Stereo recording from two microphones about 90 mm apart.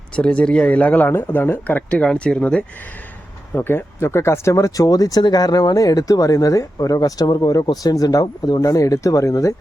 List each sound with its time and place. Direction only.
0.2 s speech: 10° left (ahead or behind)
3.5 s speech: 25° left (ahead or behind)